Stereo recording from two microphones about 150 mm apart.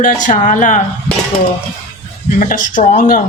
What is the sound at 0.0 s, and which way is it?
Speech, 60° left (ahead or behind).